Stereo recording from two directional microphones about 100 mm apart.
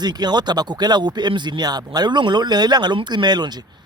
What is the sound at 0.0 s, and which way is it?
Speech, 45° right (ahead or behind).